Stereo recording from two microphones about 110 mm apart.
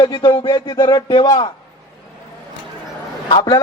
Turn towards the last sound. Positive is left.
turn(degrees=40)  # may be behind; listen again after turning